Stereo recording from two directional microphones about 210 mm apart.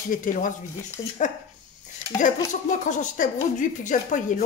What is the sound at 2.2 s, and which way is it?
Speech, 35° left (ahead or behind).